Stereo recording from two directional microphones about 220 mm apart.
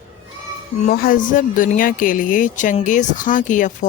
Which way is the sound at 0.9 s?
40° left (ahead or behind).